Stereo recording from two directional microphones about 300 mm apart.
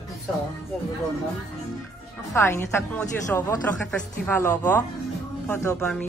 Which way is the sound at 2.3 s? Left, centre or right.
Centre.